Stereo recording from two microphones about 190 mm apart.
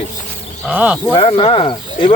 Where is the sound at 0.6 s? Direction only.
5° right (ahead or behind).